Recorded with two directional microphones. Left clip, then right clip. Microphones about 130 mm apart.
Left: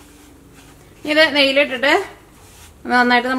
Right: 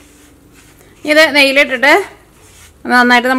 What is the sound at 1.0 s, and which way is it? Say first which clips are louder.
A woman's voice: right 6 dB; 35° right (ahead or behind).